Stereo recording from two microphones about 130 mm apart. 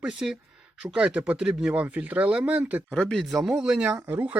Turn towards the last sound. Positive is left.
turn(degrees=-15)  # may be behind; listen again after turning